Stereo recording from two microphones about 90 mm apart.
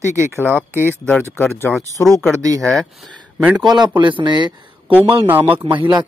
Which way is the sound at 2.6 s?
5° left (ahead or behind).